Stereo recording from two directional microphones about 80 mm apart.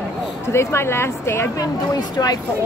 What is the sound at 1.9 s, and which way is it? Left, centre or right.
Speech, left.